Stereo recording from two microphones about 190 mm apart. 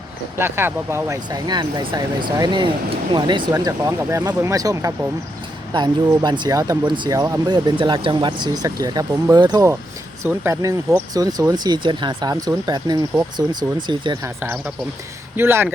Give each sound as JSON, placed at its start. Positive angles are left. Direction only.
{"t": 0.3, "sound": "speech", "side_deg": -10}
{"t": 15.4, "sound": "speech", "side_deg": -10}